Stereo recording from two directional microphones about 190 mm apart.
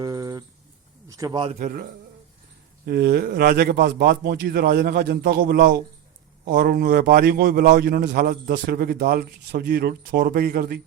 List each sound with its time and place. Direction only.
0.0 s a sound: 20° right (ahead or behind)
1.0 s a man's voice: 20° right (ahead or behind)
1.5 s a man's voice: 45° right (ahead or behind)
2.8 s a man's voice: 55° right (ahead or behind)